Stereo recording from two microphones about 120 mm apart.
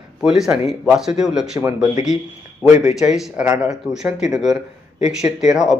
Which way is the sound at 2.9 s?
5° right (ahead or behind).